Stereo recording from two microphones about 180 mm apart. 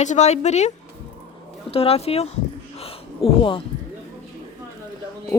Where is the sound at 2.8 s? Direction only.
30° left (ahead or behind).